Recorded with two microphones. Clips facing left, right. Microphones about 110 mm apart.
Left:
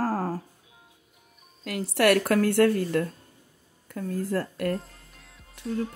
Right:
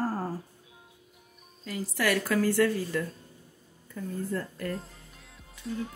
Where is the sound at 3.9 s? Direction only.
75° left (ahead or behind).